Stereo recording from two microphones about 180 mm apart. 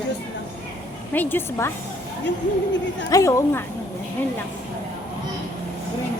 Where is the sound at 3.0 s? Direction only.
20° left (ahead or behind).